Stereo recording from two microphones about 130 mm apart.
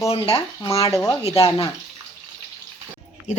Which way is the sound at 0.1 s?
45° left (ahead or behind).